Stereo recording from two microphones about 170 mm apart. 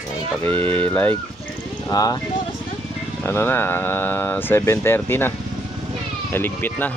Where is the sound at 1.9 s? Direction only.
20° left (ahead or behind).